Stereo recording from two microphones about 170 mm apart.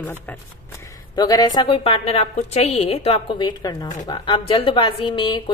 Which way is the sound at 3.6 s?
25° left (ahead or behind).